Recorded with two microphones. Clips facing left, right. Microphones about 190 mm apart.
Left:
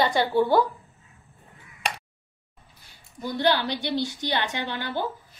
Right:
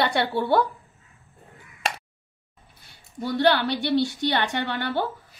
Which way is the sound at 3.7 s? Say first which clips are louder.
Right 5 dB; 60° right (ahead or behind).